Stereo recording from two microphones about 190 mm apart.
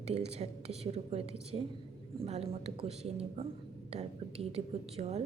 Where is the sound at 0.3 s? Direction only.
35° right (ahead or behind).